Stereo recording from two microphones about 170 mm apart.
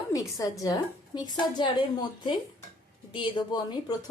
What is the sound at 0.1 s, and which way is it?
A woman's voice, 20° left (ahead or behind).